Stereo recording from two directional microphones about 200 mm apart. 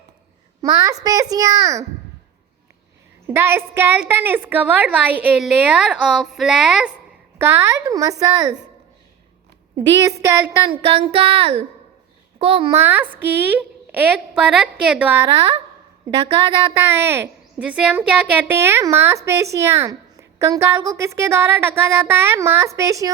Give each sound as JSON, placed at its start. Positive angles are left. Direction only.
{"t": 0.6, "sound": "speech", "side_deg": -15}
{"t": 3.2, "sound": "speech", "side_deg": -10}
{"t": 10.0, "sound": "a sound", "side_deg": -15}
{"t": 12.7, "sound": "speech", "side_deg": -10}
{"t": 16.7, "sound": "speech", "side_deg": -10}